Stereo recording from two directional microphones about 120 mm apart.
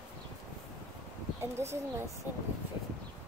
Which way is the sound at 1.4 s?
20° right (ahead or behind).